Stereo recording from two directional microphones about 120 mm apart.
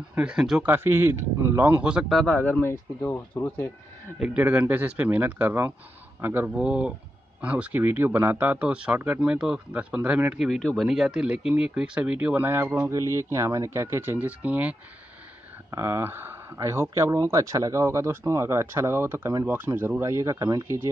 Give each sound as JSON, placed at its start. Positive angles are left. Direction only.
{"t": 0.1, "sound": "speech", "side_deg": -10}
{"t": 0.7, "sound": "speech", "side_deg": -20}
{"t": 2.2, "sound": "speech", "side_deg": 15}
{"t": 4.2, "sound": "speech", "side_deg": -10}
{"t": 6.5, "sound": "speech", "side_deg": -10}
{"t": 10.5, "sound": "speech", "side_deg": 5}
{"t": 15.7, "sound": "speech", "side_deg": -25}